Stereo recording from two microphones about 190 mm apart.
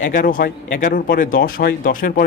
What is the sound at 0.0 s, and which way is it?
Speech, 45° left (ahead or behind).